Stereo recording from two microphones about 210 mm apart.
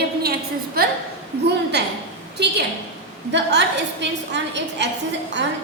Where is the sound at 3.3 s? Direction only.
55° right (ahead or behind).